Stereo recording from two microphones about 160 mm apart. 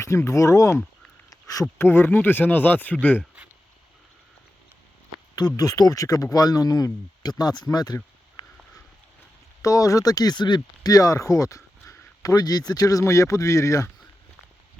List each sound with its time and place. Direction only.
0.0 s speech: 15° left (ahead or behind)
1.3 s a sound: 20° left (ahead or behind)
1.8 s speech: 15° left (ahead or behind)
3.2 s a sound: 10° right (ahead or behind)
5.3 s speech: 25° left (ahead or behind)
9.6 s speech: 20° left (ahead or behind)